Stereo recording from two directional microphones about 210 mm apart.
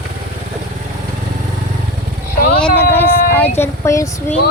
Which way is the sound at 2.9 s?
10° left (ahead or behind).